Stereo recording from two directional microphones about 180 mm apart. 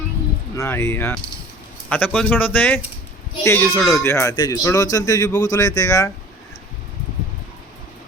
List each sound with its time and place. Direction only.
0.5 s speech: 15° left (ahead or behind)
3.8 s speech: centre (ahead or behind)
4.0 s speech: 15° left (ahead or behind)